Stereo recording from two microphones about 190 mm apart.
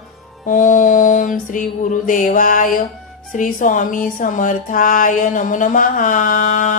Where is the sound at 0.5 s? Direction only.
40° left (ahead or behind).